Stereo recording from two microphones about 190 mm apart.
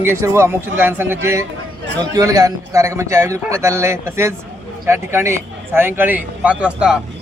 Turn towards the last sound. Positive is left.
turn(degrees=-5)  # may be behind; listen again after turning